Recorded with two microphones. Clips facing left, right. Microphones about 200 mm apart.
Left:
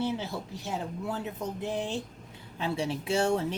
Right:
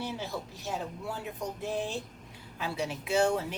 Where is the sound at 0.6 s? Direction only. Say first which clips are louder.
Left 3 dB; 20° left (ahead or behind).